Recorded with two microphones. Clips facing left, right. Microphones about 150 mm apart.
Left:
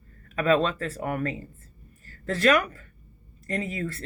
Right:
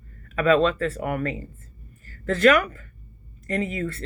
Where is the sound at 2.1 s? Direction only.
35° left (ahead or behind).